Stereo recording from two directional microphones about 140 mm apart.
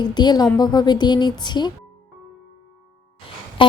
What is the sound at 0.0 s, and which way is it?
A woman's voice, 30° left (ahead or behind).